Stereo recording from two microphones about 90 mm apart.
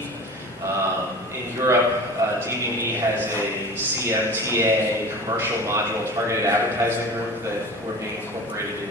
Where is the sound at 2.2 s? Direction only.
35° right (ahead or behind).